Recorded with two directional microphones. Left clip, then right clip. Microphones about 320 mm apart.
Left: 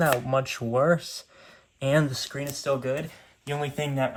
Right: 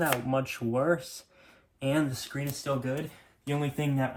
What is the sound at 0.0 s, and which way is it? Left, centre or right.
Speech, left.